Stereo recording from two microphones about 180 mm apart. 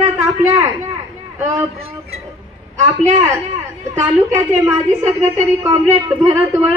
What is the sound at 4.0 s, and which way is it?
A woman's voice, 15° right (ahead or behind).